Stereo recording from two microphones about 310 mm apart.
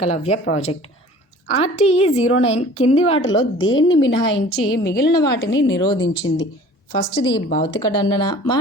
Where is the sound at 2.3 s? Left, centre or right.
Centre.